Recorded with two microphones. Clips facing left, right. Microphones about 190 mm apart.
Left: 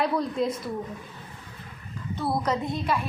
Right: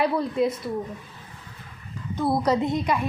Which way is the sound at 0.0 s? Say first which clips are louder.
Right 3 dB; 5° right (ahead or behind).